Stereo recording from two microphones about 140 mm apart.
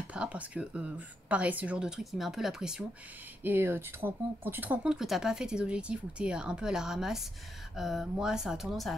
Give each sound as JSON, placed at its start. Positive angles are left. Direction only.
{"t": 0.1, "sound": "speech", "side_deg": -10}
{"t": 3.4, "sound": "speech", "side_deg": -15}